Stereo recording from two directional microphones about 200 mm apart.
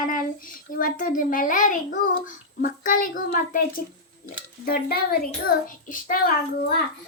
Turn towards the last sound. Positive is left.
turn(degrees=45)  # may be behind; listen again after turning